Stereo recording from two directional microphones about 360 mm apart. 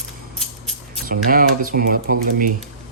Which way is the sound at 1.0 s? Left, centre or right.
Right.